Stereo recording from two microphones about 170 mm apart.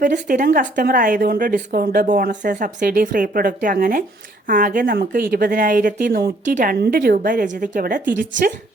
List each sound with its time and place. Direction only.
0.0 s a woman's voice: 50° right (ahead or behind)